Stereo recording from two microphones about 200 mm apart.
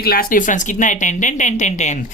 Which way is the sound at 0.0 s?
45° left (ahead or behind).